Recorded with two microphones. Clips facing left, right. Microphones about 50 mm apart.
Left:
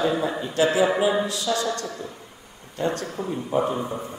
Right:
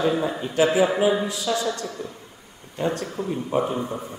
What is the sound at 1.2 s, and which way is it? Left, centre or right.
Speech, centre.